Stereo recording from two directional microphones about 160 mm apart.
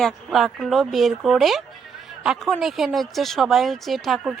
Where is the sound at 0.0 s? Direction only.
Centre (ahead or behind).